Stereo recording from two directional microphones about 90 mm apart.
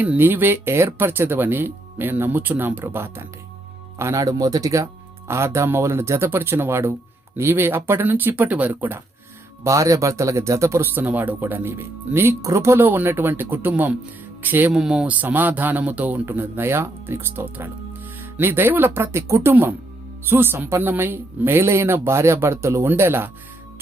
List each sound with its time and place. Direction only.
0.0 s a man's voice: 20° right (ahead or behind)
9.6 s speech: 35° right (ahead or behind)
10.9 s a man's voice: 20° right (ahead or behind)
14.7 s a man's voice: 5° right (ahead or behind); by 23.3 s 25° right (ahead or behind)